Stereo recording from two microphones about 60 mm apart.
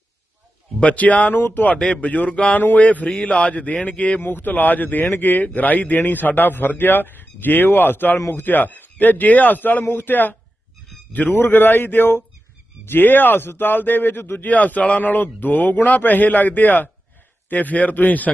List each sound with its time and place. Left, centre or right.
0.8 s speech: left
1.7 s speech: centre
4.2 s a man's voice: left